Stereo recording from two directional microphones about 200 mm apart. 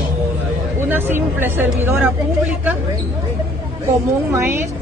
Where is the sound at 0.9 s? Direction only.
10° right (ahead or behind).